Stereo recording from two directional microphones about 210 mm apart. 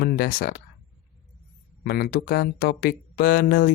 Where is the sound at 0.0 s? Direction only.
45° left (ahead or behind).